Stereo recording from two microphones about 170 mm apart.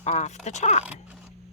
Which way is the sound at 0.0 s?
40° left (ahead or behind).